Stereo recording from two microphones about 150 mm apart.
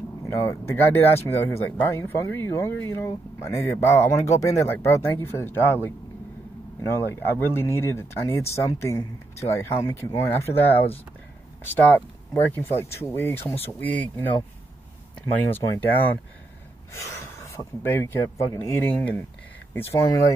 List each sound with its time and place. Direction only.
0.3 s speech: 20° left (ahead or behind)
12.4 s speech: 15° left (ahead or behind)
15.3 s speech: 15° left (ahead or behind)